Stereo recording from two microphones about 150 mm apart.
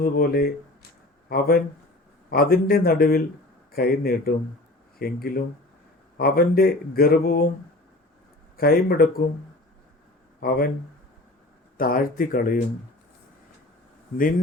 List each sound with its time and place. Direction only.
0.0 s speech: 80° left
8.5 s speech: 85° left
10.4 s speech: 85° left
11.8 s speech: 70° left (ahead or behind)